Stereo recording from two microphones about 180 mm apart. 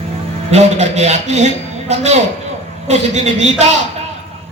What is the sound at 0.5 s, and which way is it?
A man's voice, 40° right (ahead or behind).